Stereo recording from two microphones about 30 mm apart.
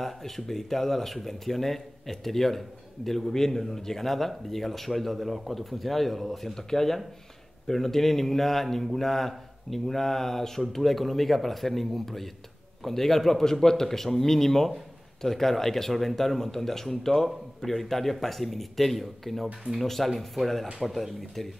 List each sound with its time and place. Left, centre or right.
0.0 s speech: centre